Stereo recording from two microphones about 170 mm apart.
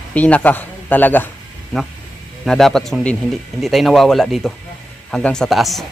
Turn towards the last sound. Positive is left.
turn(degrees=0)  # may be behind; listen again after turning